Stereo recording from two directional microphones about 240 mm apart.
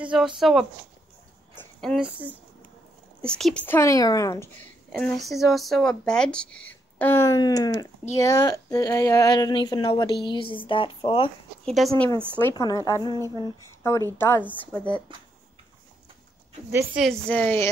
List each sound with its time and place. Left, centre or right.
0.4 s a woman's voice: centre; by 11.3 s left
11.6 s speech: centre
11.9 s a woman's voice: centre
13.3 s a sound: centre
14.1 s a woman's voice: centre
16.7 s a woman's voice: centre